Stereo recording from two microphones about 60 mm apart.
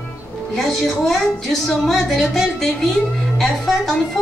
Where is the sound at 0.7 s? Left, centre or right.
Centre.